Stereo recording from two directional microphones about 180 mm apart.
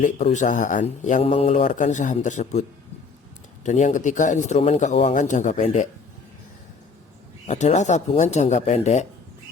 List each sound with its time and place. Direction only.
0.0 s speech: 40° left (ahead or behind)
7.4 s speech: 40° left (ahead or behind)